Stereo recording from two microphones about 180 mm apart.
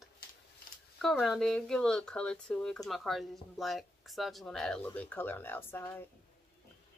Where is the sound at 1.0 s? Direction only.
Centre (ahead or behind).